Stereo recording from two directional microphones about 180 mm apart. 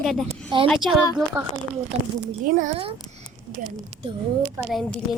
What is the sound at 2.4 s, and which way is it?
Speech, 45° right (ahead or behind).